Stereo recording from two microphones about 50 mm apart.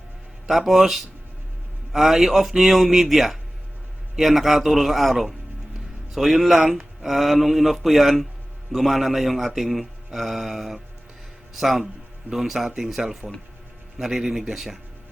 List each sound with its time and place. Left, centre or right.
0.4 s a man's voice: centre